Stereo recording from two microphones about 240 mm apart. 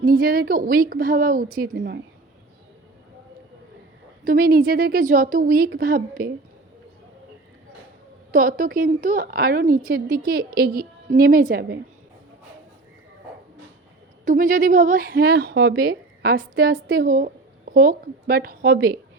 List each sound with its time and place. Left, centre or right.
0.0 s a woman's voice: right
4.2 s speech: right
8.3 s speech: right
14.3 s speech: right